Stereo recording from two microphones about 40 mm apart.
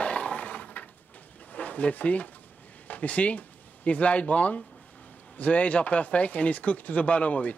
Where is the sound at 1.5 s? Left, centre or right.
Left.